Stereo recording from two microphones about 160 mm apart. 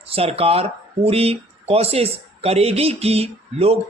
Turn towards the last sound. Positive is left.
turn(degrees=-40)  # may be behind; listen again after turning